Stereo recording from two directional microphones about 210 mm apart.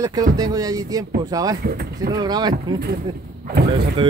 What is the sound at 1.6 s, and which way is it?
Speech, 45° right (ahead or behind).